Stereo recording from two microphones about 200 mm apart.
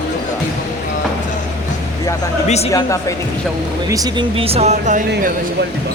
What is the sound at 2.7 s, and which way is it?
Speech, 15° left (ahead or behind).